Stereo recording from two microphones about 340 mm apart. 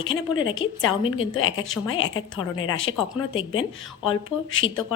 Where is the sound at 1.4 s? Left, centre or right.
Left.